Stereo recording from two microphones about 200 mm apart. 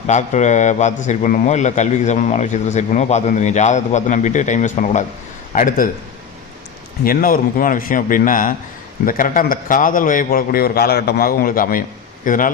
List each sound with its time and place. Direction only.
0.1 s a man's voice: 35° left (ahead or behind)
7.0 s a man's voice: 45° left (ahead or behind)